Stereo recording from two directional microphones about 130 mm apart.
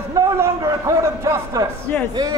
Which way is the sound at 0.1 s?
25° right (ahead or behind).